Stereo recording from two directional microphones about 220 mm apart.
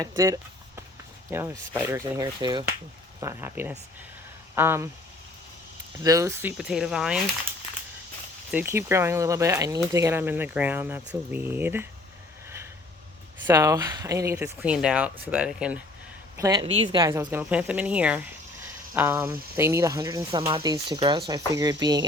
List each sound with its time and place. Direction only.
0.0 s speech: 15° right (ahead or behind)
6.0 s speech: 15° right (ahead or behind)
8.4 s speech: 10° right (ahead or behind)
13.5 s speech: 15° right (ahead or behind)
16.4 s speech: 20° right (ahead or behind)